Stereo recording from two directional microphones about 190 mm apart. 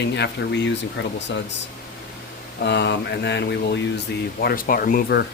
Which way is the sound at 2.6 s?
60° left (ahead or behind).